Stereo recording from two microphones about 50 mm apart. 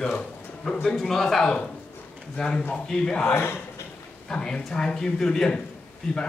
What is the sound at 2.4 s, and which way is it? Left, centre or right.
Speech, centre.